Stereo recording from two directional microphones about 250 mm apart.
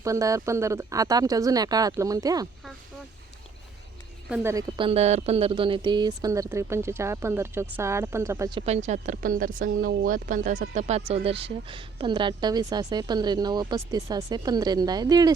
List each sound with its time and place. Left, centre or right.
0.0 s speech: centre
4.3 s speech: centre